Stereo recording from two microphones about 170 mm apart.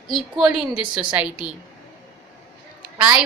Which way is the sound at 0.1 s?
5° right (ahead or behind).